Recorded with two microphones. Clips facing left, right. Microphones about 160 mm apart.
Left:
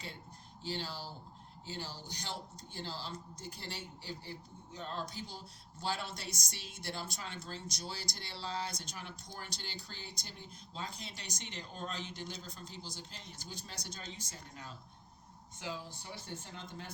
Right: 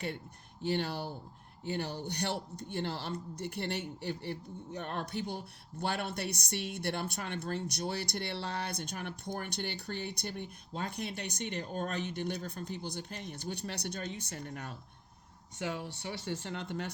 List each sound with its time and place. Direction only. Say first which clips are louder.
0.6 s speech: right 8 dB; 60° right (ahead or behind)